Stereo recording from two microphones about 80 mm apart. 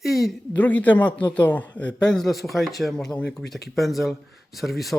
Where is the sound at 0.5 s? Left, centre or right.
Left.